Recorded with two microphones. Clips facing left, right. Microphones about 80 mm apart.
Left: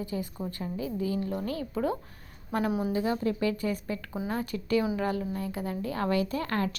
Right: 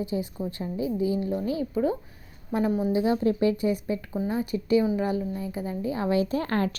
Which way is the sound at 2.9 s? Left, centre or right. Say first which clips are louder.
Right 5 dB; centre.